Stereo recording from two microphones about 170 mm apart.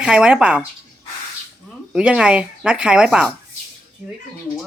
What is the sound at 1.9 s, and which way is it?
Speech, 5° right (ahead or behind).